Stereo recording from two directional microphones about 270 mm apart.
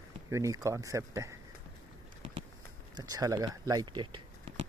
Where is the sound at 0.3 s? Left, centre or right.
Centre.